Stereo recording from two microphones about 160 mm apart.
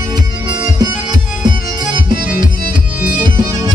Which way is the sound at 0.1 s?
25° right (ahead or behind).